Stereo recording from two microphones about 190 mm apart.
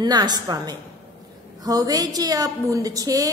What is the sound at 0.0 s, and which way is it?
A woman's voice, 20° right (ahead or behind).